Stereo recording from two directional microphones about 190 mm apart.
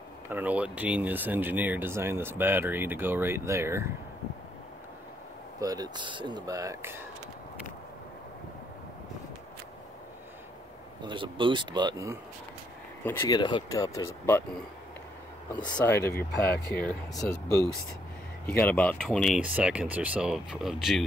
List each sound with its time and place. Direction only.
0.3 s speech: 10° right (ahead or behind)
5.6 s speech: 20° right (ahead or behind)
11.1 s speech: 25° right (ahead or behind)
13.0 s speech: 10° left (ahead or behind)
13.4 s speech: 25° left (ahead or behind)
15.5 s speech: 25° left (ahead or behind)
15.8 s speech: 10° left (ahead or behind)